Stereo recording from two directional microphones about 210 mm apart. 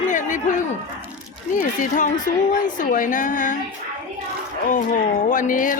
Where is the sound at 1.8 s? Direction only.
35° left (ahead or behind).